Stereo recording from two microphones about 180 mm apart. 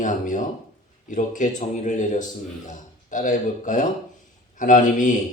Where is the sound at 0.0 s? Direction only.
45° left (ahead or behind).